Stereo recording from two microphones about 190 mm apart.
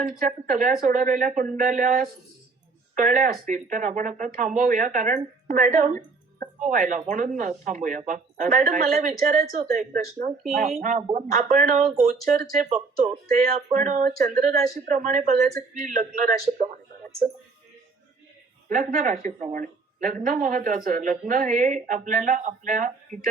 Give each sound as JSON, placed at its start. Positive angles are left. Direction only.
{"t": 0.0, "sound": "speech", "side_deg": -45}
{"t": 18.7, "sound": "speech", "side_deg": -45}